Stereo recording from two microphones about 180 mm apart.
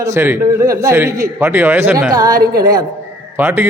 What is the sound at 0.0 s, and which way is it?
A man's voice, 15° right (ahead or behind).